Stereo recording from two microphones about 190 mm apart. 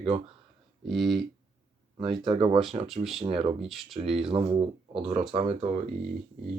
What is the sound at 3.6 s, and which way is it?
Speech, centre (ahead or behind).